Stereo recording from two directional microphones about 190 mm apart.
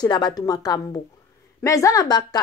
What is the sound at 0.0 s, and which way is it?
A woman's voice, 20° left (ahead or behind).